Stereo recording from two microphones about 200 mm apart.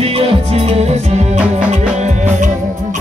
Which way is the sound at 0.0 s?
30° right (ahead or behind).